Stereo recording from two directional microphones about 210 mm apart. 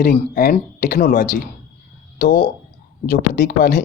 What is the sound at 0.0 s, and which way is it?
Speech, 50° left (ahead or behind).